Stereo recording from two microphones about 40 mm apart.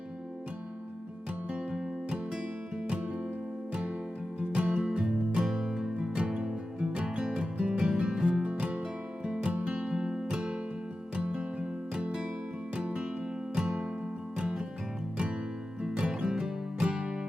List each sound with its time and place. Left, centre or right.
1.5 s music: centre
4.4 s music: right
8.4 s music: right
9.2 s music: centre
9.5 s music: right
13.6 s music: centre
15.8 s music: right